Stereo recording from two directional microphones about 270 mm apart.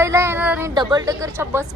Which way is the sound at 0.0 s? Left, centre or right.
Centre.